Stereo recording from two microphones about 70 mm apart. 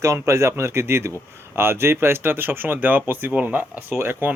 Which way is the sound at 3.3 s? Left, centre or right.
Centre.